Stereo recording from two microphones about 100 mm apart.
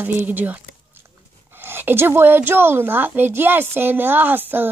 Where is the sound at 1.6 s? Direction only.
20° right (ahead or behind).